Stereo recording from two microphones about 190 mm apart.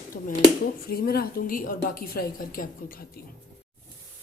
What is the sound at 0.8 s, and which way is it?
A woman's voice, 55° left (ahead or behind).